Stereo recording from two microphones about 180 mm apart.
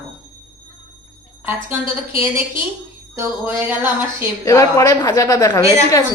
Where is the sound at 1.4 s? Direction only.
10° right (ahead or behind).